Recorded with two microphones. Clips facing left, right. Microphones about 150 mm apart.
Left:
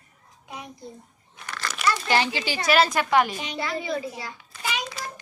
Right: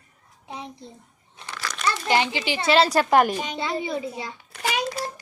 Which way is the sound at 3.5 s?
25° right (ahead or behind).